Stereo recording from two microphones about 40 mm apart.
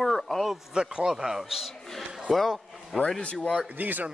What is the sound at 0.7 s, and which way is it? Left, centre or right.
Speech, centre.